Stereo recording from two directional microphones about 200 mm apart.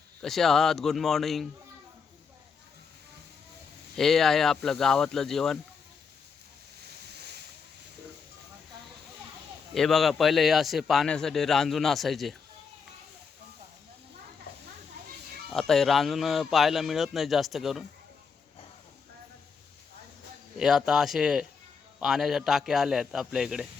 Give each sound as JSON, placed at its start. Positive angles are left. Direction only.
{"t": 0.2, "sound": "a man's voice", "side_deg": 0}
{"t": 3.9, "sound": "a man's voice", "side_deg": 0}
{"t": 9.7, "sound": "a man's voice", "side_deg": 0}
{"t": 15.5, "sound": "a man's voice", "side_deg": 0}
{"t": 20.6, "sound": "a man's voice", "side_deg": 0}